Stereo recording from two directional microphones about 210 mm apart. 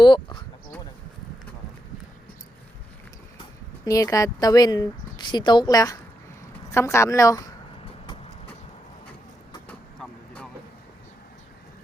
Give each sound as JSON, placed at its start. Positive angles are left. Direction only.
{"t": 0.0, "sound": "speech", "side_deg": 20}
{"t": 3.8, "sound": "a woman's voice", "side_deg": 15}
{"t": 8.0, "sound": "vehicle", "side_deg": 25}
{"t": 9.6, "sound": "vehicle", "side_deg": 5}